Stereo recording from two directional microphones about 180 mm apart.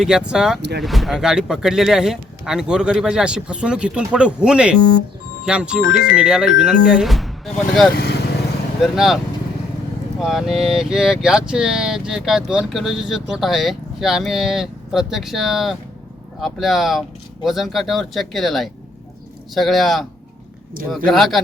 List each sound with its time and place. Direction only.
0.0 s speech: 5° right (ahead or behind)
7.9 s vehicle: 65° left (ahead or behind)
8.8 s speech: centre (ahead or behind)
21.1 s speech: centre (ahead or behind)